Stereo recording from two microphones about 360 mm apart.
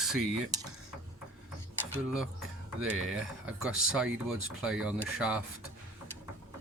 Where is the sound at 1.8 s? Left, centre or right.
Centre.